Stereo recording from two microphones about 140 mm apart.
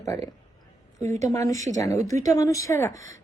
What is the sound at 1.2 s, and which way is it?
A woman's voice, 25° left (ahead or behind).